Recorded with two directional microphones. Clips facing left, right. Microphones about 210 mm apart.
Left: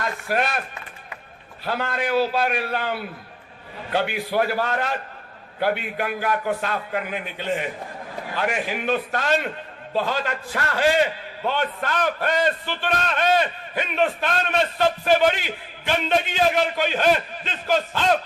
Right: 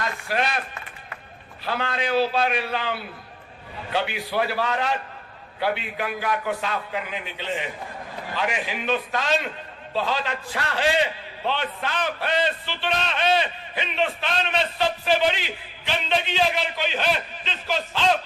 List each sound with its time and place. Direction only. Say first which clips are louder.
0.3 s a man's voice: left 2 dB; 50° left (ahead or behind)
1.6 s a man's voice: left 1 dB; 45° left (ahead or behind)